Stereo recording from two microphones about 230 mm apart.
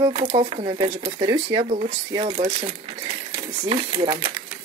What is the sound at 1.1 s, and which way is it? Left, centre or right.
Speech, centre.